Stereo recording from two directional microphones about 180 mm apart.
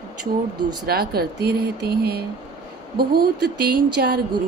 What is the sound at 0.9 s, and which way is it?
Speech, 60° right (ahead or behind).